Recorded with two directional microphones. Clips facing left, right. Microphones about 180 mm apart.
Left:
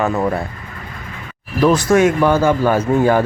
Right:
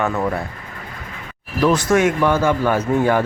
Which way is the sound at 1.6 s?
35° left (ahead or behind).